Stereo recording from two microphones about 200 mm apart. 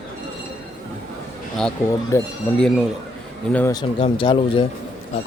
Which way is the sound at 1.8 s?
10° left (ahead or behind).